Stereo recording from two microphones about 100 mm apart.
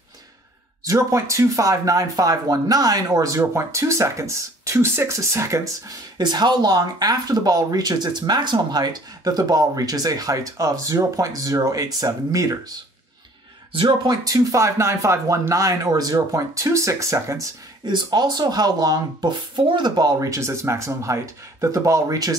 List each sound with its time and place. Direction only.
0.8 s speech: 30° right (ahead or behind)
13.7 s speech: 45° right (ahead or behind)